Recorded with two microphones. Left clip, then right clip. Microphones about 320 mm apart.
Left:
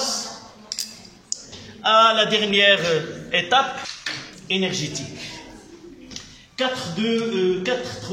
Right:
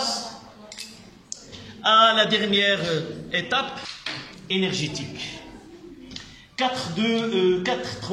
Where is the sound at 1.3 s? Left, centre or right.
Centre.